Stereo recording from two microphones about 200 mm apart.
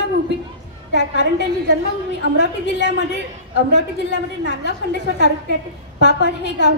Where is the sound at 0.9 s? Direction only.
60° left (ahead or behind).